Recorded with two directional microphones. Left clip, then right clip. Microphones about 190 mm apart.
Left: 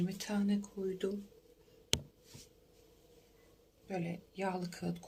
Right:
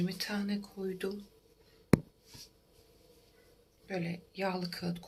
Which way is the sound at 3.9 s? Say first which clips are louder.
Right 2 dB; 10° left (ahead or behind).